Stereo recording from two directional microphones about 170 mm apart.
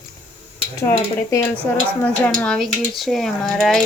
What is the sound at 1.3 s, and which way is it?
Speech, 10° left (ahead or behind).